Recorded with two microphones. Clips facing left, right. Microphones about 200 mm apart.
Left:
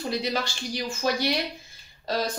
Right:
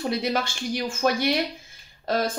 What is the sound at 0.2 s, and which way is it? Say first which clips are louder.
A woman's voice: right 3 dB; 50° right (ahead or behind).